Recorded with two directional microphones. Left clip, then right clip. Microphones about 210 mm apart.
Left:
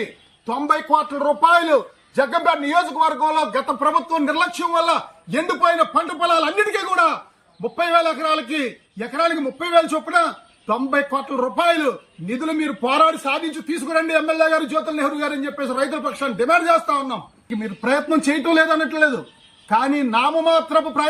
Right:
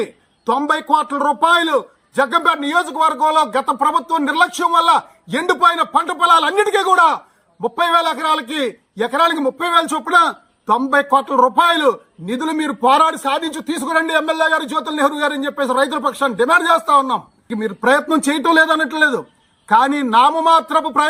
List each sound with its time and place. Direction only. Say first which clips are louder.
0.4 s a man's voice: right 3 dB; 20° right (ahead or behind)